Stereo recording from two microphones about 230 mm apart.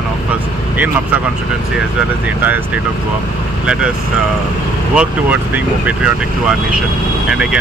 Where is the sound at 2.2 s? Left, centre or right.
Centre.